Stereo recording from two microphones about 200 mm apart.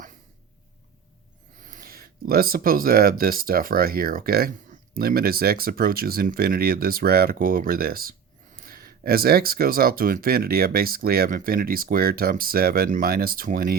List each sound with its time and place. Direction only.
1.6 s speech: 45° right (ahead or behind)